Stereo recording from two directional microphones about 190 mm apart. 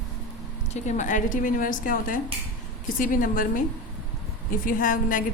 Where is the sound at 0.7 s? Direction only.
40° left (ahead or behind).